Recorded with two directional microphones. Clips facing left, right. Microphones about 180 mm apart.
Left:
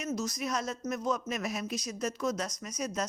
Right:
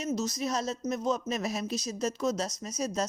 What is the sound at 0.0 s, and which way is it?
A woman's voice, 25° right (ahead or behind).